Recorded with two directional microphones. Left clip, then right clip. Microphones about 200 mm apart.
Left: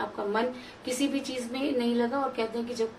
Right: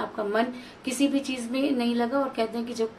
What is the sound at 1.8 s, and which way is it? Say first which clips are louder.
Speech: right 2 dB; 30° right (ahead or behind).